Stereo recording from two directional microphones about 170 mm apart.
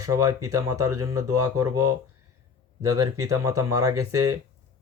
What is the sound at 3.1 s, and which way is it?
Speech, 20° right (ahead or behind).